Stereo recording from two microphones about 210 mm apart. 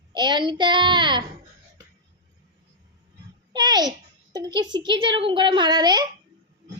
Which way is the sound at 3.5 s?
20° right (ahead or behind).